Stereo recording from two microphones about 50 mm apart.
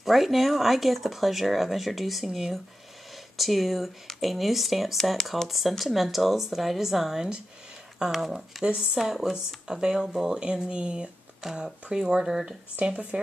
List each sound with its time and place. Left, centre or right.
0.0 s speech: centre
12.7 s speech: right